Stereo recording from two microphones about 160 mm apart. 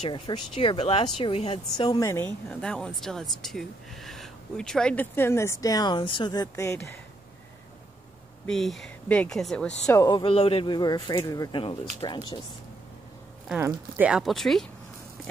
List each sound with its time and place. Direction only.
0.0 s speech: 35° left (ahead or behind)
1.9 s speech: 20° left (ahead or behind)
8.5 s speech: centre (ahead or behind)
9.8 s speech: 20° left (ahead or behind)
13.5 s speech: 15° right (ahead or behind)